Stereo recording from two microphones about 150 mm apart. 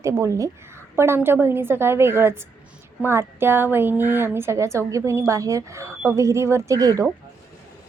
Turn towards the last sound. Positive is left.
turn(degrees=-25)  # may be behind; listen again after turning